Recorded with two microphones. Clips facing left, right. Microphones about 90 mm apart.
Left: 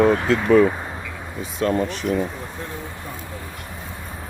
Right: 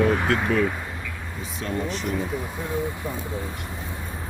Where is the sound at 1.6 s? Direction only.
75° left (ahead or behind).